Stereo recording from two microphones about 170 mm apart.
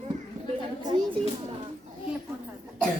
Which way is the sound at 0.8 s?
25° right (ahead or behind).